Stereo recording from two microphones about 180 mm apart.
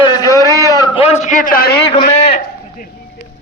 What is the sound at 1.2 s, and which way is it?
Speech, 45° left (ahead or behind).